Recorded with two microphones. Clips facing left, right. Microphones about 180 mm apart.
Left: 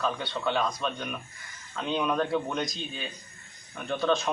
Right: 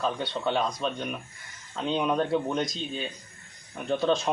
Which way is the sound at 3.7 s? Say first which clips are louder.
Right 2 dB; 30° right (ahead or behind).